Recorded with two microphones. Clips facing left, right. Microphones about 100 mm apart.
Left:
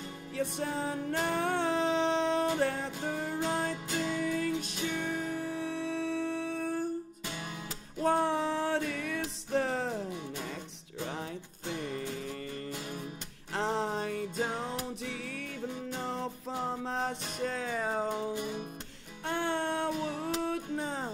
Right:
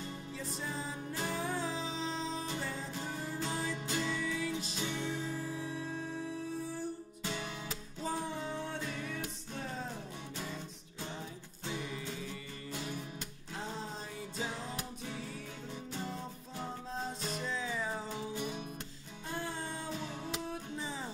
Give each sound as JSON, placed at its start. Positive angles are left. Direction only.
{"t": 0.4, "sound": "music", "side_deg": 65}
{"t": 8.0, "sound": "music", "side_deg": 70}
{"t": 11.7, "sound": "music", "side_deg": 50}
{"t": 13.5, "sound": "music", "side_deg": 75}
{"t": 19.2, "sound": "music", "side_deg": 75}